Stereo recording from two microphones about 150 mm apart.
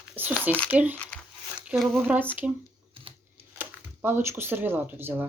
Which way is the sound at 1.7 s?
Centre (ahead or behind).